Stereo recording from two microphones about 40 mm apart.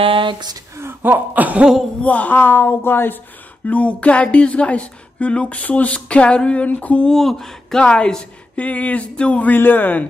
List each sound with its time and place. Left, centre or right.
1.0 s a sound: right
2.0 s a woman's voice: left
3.6 s speech: left
7.1 s speech: centre
7.8 s speech: left
9.5 s a woman's voice: left